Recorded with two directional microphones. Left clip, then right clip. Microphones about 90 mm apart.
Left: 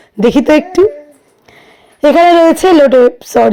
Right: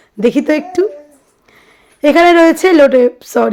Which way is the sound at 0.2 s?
45° left (ahead or behind).